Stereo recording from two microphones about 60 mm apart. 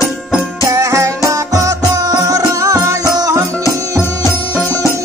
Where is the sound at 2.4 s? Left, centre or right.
Right.